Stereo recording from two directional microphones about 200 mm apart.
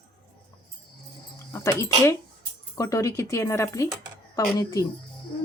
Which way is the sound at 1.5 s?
15° left (ahead or behind).